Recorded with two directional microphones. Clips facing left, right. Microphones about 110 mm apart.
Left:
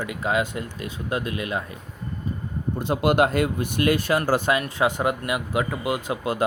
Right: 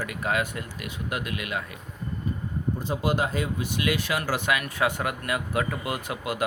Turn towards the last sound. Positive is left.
turn(degrees=30)  # may be behind; listen again after turning